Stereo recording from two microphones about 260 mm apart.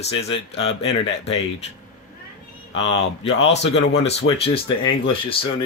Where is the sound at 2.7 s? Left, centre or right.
Left.